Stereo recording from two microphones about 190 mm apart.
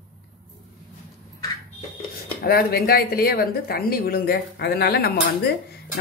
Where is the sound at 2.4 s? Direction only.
55° left (ahead or behind).